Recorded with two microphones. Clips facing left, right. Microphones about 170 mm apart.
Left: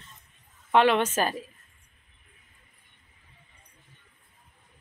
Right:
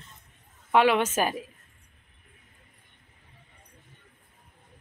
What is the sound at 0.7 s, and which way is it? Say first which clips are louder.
Speech: even; 10° right (ahead or behind).